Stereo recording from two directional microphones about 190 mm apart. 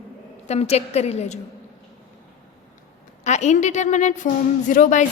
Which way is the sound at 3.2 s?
40° left (ahead or behind).